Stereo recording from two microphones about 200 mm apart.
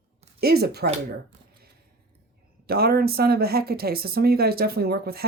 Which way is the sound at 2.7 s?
50° right (ahead or behind).